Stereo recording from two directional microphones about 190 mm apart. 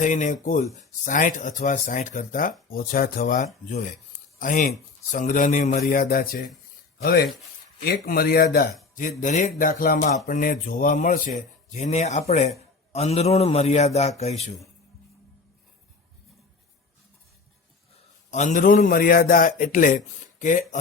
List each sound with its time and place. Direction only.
0.0 s speech: 40° left (ahead or behind)
9.0 s a man's voice: 45° left (ahead or behind)
18.3 s speech: 40° left (ahead or behind)